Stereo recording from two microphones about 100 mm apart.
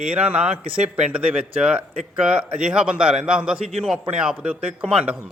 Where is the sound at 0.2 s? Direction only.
15° right (ahead or behind).